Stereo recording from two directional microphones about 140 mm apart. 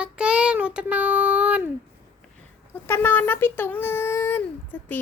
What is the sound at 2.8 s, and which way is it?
Speech, 15° left (ahead or behind).